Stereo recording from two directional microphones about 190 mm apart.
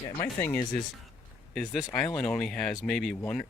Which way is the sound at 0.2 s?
10° left (ahead or behind).